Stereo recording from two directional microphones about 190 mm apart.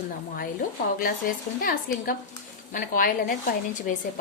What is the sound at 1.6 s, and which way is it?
A woman's voice, 50° left (ahead or behind).